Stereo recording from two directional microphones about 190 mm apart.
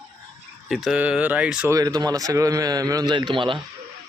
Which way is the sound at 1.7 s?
20° right (ahead or behind).